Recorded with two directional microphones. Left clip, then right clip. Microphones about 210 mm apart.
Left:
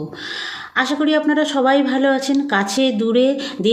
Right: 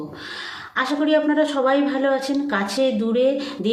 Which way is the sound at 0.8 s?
40° left (ahead or behind).